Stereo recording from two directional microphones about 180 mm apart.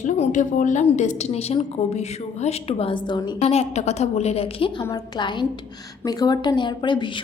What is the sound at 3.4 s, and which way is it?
A woman's voice, 35° left (ahead or behind).